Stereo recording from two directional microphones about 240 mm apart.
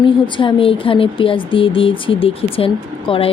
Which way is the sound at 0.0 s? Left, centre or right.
Left.